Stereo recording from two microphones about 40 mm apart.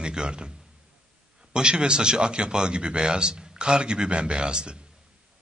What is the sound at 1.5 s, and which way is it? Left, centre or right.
A man's voice, right.